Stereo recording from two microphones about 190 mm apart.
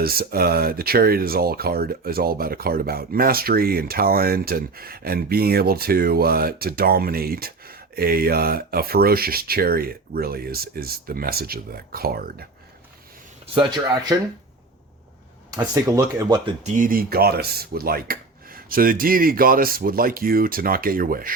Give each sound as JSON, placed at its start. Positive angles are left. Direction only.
{"t": 0.0, "sound": "speech", "side_deg": -55}
{"t": 13.5, "sound": "speech", "side_deg": -25}
{"t": 15.4, "sound": "speech", "side_deg": -20}
{"t": 16.5, "sound": "speech", "side_deg": -40}